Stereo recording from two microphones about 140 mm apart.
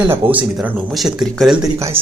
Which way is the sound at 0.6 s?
Centre (ahead or behind).